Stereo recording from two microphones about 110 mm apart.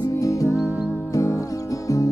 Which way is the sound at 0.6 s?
15° right (ahead or behind).